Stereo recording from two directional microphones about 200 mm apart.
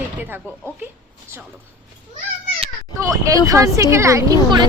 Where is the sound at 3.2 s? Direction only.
15° right (ahead or behind).